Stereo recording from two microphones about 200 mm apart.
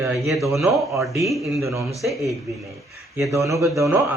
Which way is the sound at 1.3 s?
Centre (ahead or behind).